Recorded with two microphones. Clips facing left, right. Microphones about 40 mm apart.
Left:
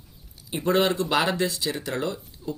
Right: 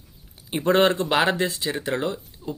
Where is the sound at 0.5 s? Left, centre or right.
Right.